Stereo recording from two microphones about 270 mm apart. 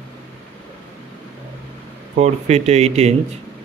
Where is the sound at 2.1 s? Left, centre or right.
Right.